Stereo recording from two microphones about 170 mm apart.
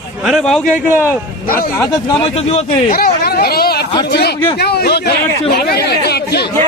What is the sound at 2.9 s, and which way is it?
Speech, 65° left (ahead or behind).